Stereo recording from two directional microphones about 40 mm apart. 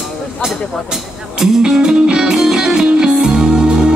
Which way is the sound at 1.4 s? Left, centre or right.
Centre.